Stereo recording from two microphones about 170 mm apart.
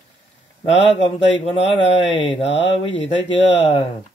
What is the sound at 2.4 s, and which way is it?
Speech, 35° left (ahead or behind).